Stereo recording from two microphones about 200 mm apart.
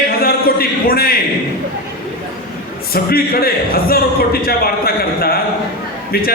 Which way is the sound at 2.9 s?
50° left (ahead or behind).